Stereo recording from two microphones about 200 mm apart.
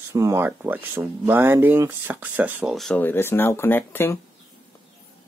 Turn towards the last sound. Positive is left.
turn(degrees=10)  # may be behind; listen again after turning